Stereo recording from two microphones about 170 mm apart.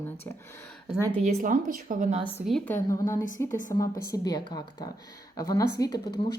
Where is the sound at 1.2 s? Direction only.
50° right (ahead or behind).